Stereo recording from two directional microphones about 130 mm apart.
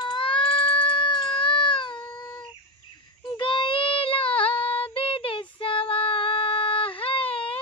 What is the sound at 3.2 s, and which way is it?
Child singing, 40° left (ahead or behind).